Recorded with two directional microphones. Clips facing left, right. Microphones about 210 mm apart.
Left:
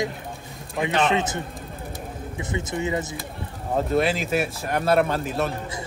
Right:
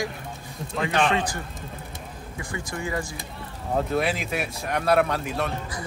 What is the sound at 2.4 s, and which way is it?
Speech, 20° left (ahead or behind).